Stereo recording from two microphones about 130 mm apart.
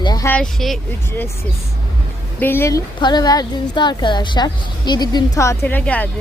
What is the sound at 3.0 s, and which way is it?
A woman's voice, 35° left (ahead or behind).